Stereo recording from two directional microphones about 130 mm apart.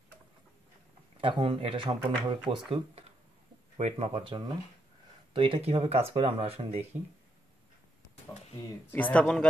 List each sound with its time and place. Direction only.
1.2 s speech: 40° right (ahead or behind)
3.7 s speech: 55° right (ahead or behind)
8.9 s speech: 10° left (ahead or behind)